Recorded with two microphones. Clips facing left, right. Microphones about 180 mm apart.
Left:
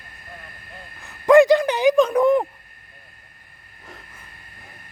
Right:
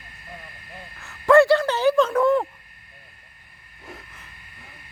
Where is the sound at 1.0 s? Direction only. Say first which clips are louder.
Left 2 dB; 15° left (ahead or behind).